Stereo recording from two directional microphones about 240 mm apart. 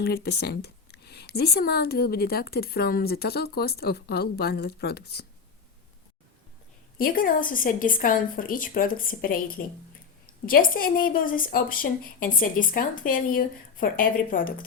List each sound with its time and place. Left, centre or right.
0.0 s speech: left
7.0 s speech: left